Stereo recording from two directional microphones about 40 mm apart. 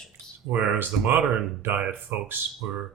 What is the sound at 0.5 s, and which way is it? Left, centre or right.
Speech, right.